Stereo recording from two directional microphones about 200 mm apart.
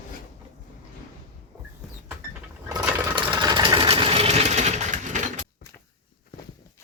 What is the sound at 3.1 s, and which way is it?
Sewing machine, 25° right (ahead or behind).